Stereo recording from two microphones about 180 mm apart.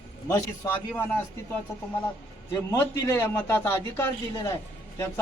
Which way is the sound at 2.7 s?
15° left (ahead or behind).